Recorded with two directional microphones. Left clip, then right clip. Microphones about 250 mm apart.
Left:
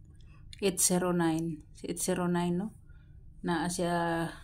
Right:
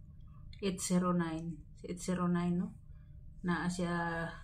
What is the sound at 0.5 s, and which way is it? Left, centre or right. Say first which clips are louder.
Speech: left 7 dB; left.